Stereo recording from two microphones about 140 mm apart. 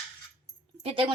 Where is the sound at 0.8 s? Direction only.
35° right (ahead or behind).